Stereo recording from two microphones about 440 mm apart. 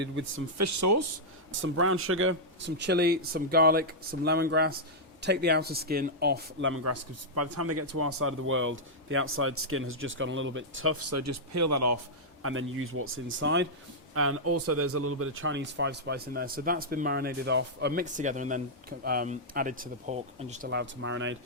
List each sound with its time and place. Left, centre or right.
0.0 s a man's voice: right
0.6 s a man's voice: right